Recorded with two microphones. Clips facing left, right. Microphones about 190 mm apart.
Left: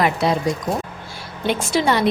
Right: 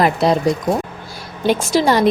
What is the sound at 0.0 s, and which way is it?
A woman's voice, 35° right (ahead or behind).